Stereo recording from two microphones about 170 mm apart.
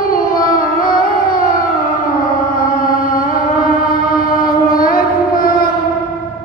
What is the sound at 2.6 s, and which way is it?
Music, 55° left (ahead or behind).